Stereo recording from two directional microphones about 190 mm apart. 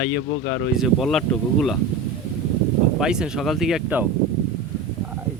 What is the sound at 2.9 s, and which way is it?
Speech, 5° right (ahead or behind).